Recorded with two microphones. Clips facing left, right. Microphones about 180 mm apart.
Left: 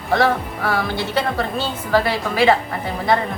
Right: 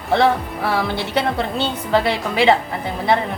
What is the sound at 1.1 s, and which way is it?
A woman's voice, 20° right (ahead or behind).